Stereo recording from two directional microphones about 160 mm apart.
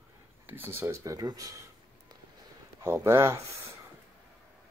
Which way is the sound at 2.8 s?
15° right (ahead or behind).